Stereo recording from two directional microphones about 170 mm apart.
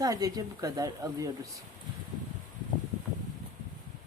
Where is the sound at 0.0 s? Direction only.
20° right (ahead or behind).